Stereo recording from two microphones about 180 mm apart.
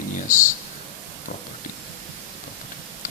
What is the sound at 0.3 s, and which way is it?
Speech, 45° left (ahead or behind).